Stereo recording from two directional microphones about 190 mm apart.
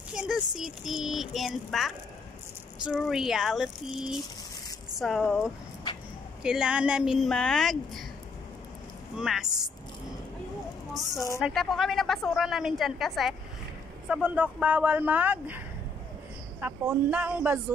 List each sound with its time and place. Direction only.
0.1 s a woman's voice: 5° right (ahead or behind)
6.4 s a woman's voice: 5° right (ahead or behind)
9.1 s a woman's voice: centre (ahead or behind)
11.1 s a woman's voice: 15° left (ahead or behind)
11.4 s a woman's voice: centre (ahead or behind)
16.6 s speech: 10° right (ahead or behind)